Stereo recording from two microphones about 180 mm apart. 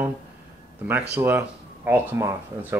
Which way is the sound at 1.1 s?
10° right (ahead or behind).